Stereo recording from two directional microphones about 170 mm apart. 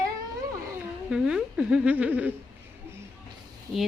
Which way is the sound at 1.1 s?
5° right (ahead or behind).